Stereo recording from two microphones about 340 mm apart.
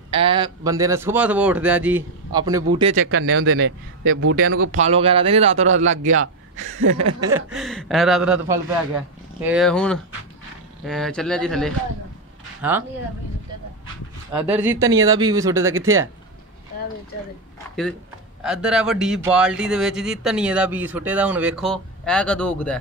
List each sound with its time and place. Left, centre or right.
0.1 s a man's voice: centre
2.9 s a man's voice: right
4.7 s a man's voice: centre
5.6 s a man's voice: right
7.2 s speech: centre
14.3 s a man's voice: centre
18.4 s speech: centre